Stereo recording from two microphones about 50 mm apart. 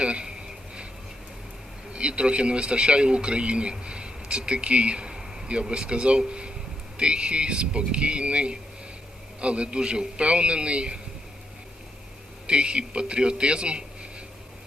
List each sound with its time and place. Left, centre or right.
0.0 s a sound: centre
1.9 s a man's voice: right
12.5 s a man's voice: centre